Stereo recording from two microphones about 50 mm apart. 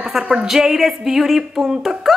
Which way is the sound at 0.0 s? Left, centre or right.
Centre.